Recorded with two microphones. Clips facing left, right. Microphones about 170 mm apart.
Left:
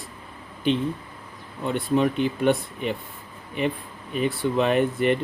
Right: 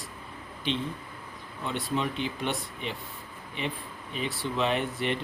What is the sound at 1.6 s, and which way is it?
Speech, 50° left (ahead or behind).